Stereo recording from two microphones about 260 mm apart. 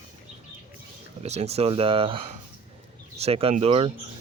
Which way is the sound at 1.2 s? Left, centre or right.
Right.